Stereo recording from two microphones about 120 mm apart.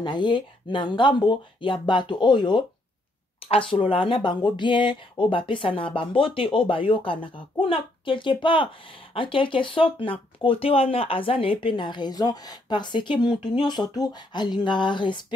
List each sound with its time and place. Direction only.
0.0 s speech: 40° left (ahead or behind)
3.4 s speech: 50° left (ahead or behind)